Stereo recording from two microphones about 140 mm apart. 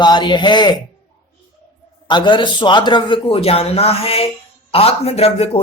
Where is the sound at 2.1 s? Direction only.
35° left (ahead or behind).